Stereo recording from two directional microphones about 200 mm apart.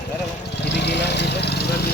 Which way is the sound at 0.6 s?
60° left (ahead or behind).